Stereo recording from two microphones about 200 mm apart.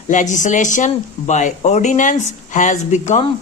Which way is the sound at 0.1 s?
35° left (ahead or behind).